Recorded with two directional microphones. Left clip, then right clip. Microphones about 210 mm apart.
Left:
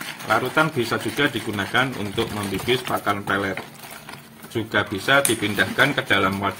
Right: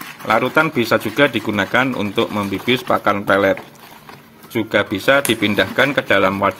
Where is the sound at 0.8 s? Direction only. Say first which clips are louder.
Right 7 dB; 40° right (ahead or behind).